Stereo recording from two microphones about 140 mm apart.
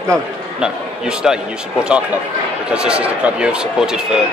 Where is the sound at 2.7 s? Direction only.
5° right (ahead or behind).